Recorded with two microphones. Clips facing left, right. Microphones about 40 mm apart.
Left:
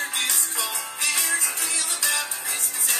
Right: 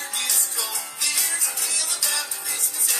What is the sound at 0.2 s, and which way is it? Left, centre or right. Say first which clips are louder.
Music: left 2 dB; left.